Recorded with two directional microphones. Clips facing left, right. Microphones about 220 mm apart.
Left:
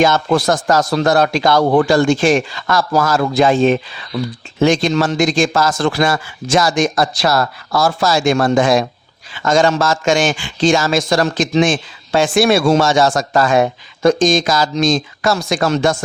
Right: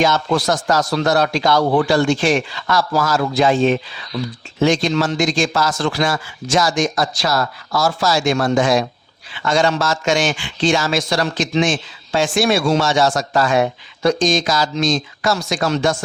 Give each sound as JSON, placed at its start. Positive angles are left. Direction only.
{"t": 0.0, "sound": "a man's voice", "side_deg": 50}